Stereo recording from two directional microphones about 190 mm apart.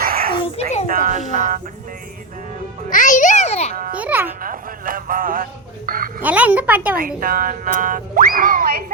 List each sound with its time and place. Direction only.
0.0 s a sound: 50° right (ahead or behind)
0.9 s speech: 45° right (ahead or behind)
2.9 s music: 40° left (ahead or behind)
3.9 s speech: 10° right (ahead or behind)
4.4 s speech: 45° right (ahead or behind)
6.2 s speech: 10° right (ahead or behind)
7.2 s speech: 50° right (ahead or behind)